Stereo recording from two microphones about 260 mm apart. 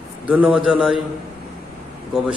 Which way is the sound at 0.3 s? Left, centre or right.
Centre.